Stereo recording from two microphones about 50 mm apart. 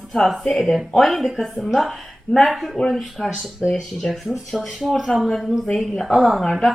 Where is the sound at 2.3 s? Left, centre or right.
Centre.